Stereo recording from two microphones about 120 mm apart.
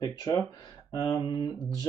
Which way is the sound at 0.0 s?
35° left (ahead or behind).